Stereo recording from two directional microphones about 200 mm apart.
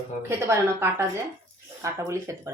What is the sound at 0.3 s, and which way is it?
Speech, 10° right (ahead or behind).